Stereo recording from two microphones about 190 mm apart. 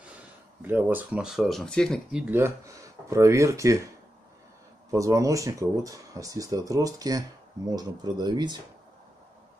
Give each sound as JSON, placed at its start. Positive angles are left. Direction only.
{"t": 0.6, "sound": "speech", "side_deg": -10}
{"t": 2.2, "sound": "speech", "side_deg": -10}
{"t": 4.9, "sound": "speech", "side_deg": -15}